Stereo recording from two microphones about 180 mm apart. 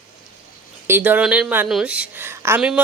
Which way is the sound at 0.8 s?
10° right (ahead or behind).